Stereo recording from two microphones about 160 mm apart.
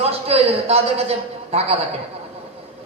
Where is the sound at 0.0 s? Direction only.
40° right (ahead or behind).